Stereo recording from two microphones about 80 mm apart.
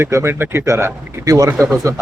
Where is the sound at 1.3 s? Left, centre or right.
Right.